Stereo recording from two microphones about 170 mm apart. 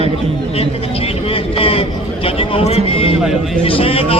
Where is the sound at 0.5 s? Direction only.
35° left (ahead or behind).